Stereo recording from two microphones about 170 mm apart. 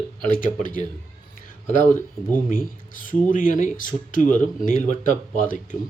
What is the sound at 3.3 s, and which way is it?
Speech, 50° left (ahead or behind).